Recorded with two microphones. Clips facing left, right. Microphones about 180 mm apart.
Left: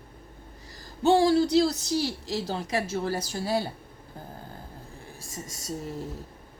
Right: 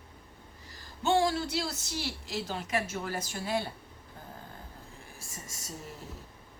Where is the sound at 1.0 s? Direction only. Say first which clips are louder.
Left 7 dB; 35° left (ahead or behind).